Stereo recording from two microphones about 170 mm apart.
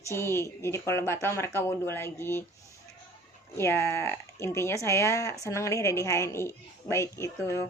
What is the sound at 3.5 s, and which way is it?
Speech, 15° left (ahead or behind).